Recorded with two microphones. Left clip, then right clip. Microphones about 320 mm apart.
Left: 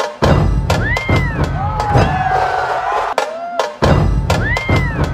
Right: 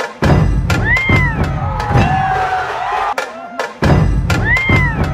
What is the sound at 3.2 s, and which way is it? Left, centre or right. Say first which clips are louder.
Music: left 3 dB; left.